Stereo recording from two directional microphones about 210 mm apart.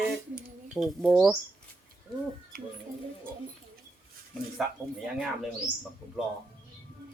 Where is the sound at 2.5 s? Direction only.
45° right (ahead or behind).